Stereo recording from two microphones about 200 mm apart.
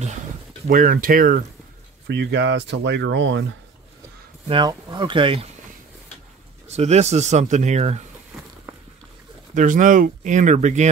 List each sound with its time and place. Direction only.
0.7 s speech: 45° right (ahead or behind)
2.0 s speech: 65° right (ahead or behind)
4.5 s speech: 20° right (ahead or behind)
6.7 s speech: 35° right (ahead or behind)
9.5 s speech: 40° right (ahead or behind)